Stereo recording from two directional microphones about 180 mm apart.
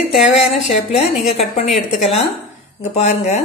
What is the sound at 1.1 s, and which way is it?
Speech, centre (ahead or behind).